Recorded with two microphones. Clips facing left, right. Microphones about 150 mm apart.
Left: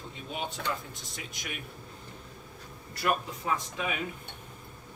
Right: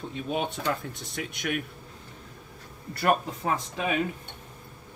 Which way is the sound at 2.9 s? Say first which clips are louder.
Right 5 dB; 50° right (ahead or behind).